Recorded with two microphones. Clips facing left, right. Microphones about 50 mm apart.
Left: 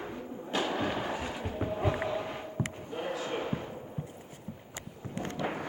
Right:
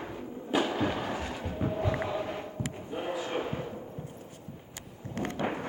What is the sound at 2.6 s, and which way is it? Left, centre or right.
Basketball bounce, left.